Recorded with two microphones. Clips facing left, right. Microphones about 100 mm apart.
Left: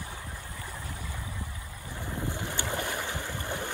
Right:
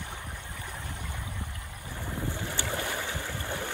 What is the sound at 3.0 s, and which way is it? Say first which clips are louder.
Boat: even; 15° right (ahead or behind).